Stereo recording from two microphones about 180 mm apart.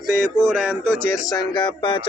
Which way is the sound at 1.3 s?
25° left (ahead or behind).